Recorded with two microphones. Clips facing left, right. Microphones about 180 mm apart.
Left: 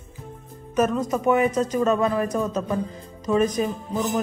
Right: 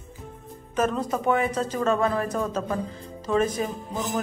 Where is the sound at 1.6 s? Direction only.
15° left (ahead or behind).